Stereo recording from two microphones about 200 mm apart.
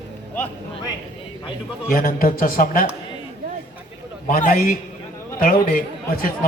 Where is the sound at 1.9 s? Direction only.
45° left (ahead or behind).